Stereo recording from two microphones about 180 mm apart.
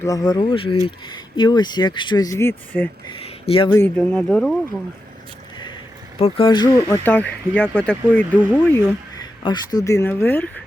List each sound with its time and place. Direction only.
0.0 s speech: 20° left (ahead or behind)
3.1 s speech: 30° left (ahead or behind)
3.8 s speech: 10° left (ahead or behind)
6.1 s speech: 30° left (ahead or behind); by 9.2 s 10° left (ahead or behind)
9.4 s speech: 25° left (ahead or behind)